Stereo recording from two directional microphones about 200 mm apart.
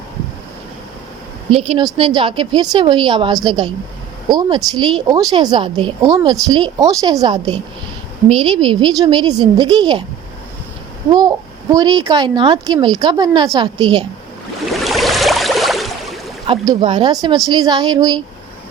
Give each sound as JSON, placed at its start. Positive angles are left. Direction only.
{"t": 1.5, "sound": "a child's voice", "side_deg": -30}
{"t": 11.1, "sound": "a child's voice", "side_deg": -20}
{"t": 14.7, "sound": "a sound", "side_deg": 0}
{"t": 16.5, "sound": "a child's voice", "side_deg": -25}